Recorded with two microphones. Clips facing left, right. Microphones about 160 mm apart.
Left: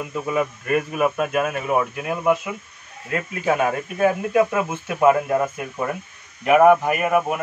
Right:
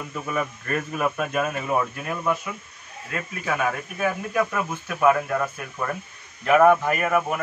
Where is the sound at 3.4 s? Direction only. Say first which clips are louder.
Left 5 dB; 30° left (ahead or behind).